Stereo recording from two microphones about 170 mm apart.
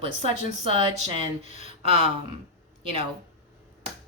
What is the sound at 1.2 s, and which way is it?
Speech, 45° left (ahead or behind).